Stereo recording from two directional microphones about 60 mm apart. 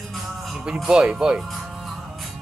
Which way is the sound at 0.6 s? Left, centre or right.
Centre.